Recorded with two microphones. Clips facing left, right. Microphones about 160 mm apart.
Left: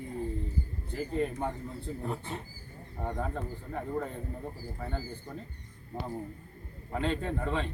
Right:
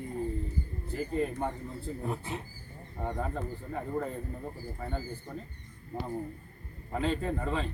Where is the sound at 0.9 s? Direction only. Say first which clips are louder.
Even; centre (ahead or behind).